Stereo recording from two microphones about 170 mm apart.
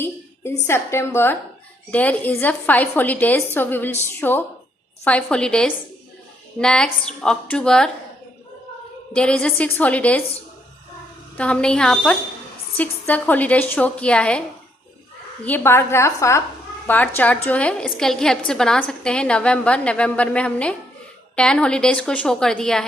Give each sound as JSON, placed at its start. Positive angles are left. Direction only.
{"t": 0.7, "sound": "a woman's voice", "side_deg": 15}
{"t": 9.1, "sound": "a woman's voice", "side_deg": 5}
{"t": 11.3, "sound": "a woman's voice", "side_deg": 5}
{"t": 15.4, "sound": "a woman's voice", "side_deg": 10}